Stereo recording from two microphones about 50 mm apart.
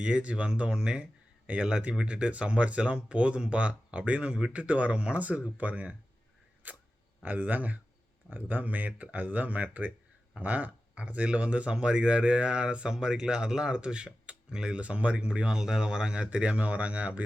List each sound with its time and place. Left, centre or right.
0.0 s speech: right
6.6 s a sound: right
7.2 s speech: right